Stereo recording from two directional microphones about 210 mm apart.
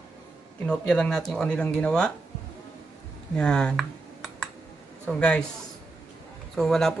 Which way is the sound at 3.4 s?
5° left (ahead or behind).